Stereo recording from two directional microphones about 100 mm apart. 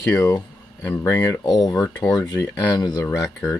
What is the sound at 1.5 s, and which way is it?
Speech, 45° left (ahead or behind).